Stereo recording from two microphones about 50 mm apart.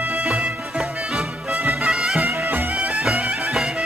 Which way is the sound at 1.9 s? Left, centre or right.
Centre.